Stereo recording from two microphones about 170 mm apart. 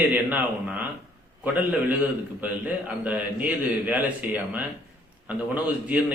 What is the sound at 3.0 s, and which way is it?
A man's voice, 10° right (ahead or behind).